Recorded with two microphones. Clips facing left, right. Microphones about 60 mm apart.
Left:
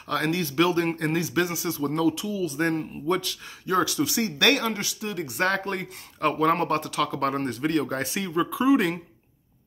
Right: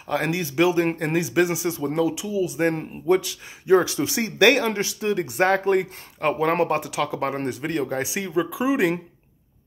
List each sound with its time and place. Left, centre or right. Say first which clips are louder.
0.1 s speech: right 1 dB; centre
3.7 s speech: right 5 dB; right
5.5 s speech: right 7 dB; centre